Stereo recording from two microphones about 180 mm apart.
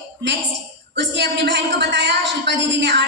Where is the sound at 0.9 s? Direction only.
80° right.